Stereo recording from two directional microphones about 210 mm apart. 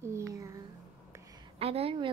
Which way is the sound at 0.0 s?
15° right (ahead or behind).